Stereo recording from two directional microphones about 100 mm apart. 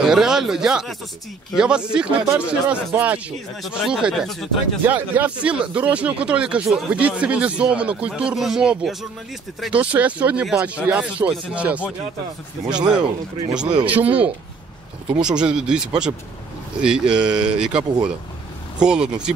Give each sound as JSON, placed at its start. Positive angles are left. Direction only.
{"t": 0.0, "sound": "speech", "side_deg": -5}
{"t": 3.6, "sound": "speech", "side_deg": -5}
{"t": 4.8, "sound": "speech", "side_deg": -20}
{"t": 12.9, "sound": "speech", "side_deg": -10}